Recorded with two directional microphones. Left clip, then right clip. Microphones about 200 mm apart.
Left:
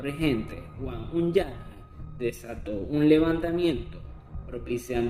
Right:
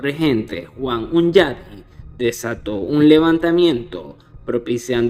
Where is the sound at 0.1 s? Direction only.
40° right (ahead or behind).